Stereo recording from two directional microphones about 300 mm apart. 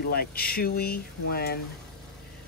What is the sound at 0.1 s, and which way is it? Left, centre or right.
Speech, left.